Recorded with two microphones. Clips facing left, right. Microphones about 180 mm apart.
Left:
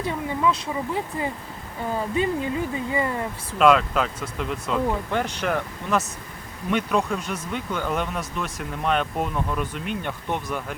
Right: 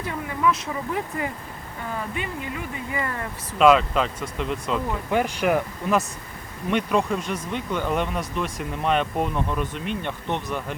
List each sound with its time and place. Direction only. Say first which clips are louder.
0.0 s speech: left 1 dB; 25° left (ahead or behind)
3.6 s speech: right 1 dB; centre (ahead or behind)